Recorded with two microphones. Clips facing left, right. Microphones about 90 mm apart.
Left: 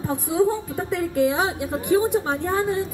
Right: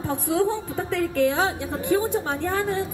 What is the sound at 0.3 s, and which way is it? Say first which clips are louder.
A woman's voice: left 2 dB; 15° left (ahead or behind).